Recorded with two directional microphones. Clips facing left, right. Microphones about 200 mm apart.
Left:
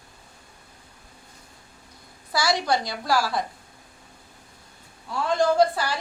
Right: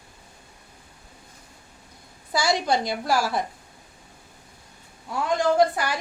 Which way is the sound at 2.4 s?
20° right (ahead or behind).